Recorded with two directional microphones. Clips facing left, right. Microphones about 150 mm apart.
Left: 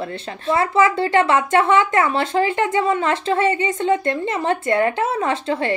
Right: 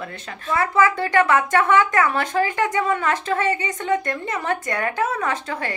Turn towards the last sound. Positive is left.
turn(degrees=25)  # may be behind; listen again after turning